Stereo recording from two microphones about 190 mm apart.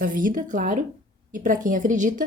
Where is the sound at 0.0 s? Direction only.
45° right (ahead or behind).